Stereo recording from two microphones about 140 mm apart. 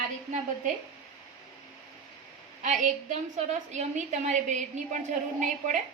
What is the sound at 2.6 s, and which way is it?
A woman's voice, 60° right (ahead or behind).